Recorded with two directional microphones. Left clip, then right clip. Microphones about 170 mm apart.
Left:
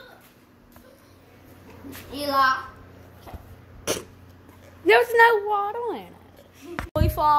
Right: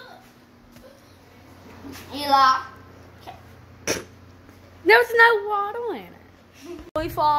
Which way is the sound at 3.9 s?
Centre (ahead or behind).